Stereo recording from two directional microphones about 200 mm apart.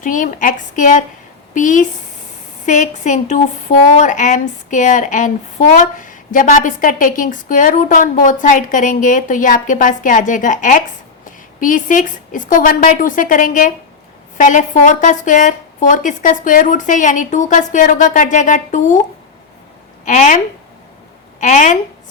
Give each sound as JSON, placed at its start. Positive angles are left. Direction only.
{"t": 0.0, "sound": "speech", "side_deg": 40}
{"t": 20.1, "sound": "speech", "side_deg": 40}
{"t": 21.4, "sound": "speech", "side_deg": 40}